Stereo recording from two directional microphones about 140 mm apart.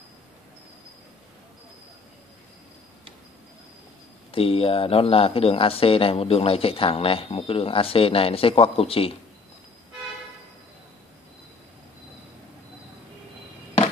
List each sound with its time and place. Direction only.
4.3 s speech: 40° left (ahead or behind)